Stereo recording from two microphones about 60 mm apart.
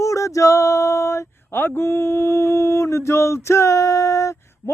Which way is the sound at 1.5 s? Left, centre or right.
Left.